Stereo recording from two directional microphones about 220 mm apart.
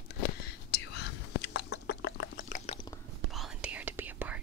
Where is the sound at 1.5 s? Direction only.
50° left (ahead or behind).